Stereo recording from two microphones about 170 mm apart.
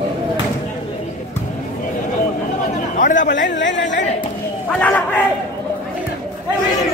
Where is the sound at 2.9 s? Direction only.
50° left (ahead or behind).